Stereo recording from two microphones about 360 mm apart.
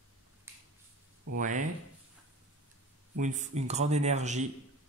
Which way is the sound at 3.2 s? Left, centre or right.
Centre.